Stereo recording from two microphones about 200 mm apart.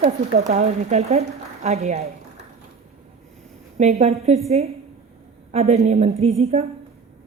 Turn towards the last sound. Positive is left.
turn(degrees=-30)  # may be behind; listen again after turning